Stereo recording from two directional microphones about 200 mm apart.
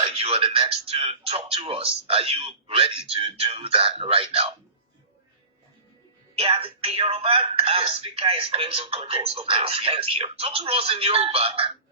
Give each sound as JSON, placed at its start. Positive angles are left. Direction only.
{"t": 0.0, "sound": "speech", "side_deg": -30}
{"t": 6.3, "sound": "speech", "side_deg": -30}